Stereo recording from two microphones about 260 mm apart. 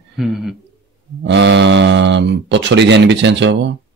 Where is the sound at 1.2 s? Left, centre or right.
Right.